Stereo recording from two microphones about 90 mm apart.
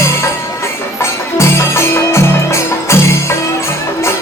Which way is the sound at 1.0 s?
30° left (ahead or behind).